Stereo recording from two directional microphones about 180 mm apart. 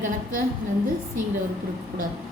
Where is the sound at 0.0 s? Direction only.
50° right (ahead or behind).